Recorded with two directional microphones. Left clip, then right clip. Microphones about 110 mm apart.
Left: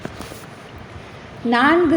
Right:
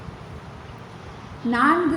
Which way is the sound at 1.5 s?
40° left (ahead or behind).